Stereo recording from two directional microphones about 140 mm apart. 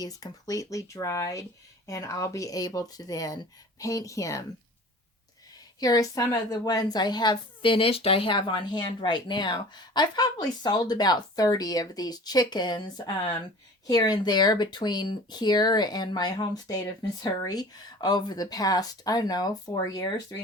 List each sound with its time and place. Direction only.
0.0 s speech: 25° left (ahead or behind)
5.8 s a woman's voice: 25° left (ahead or behind)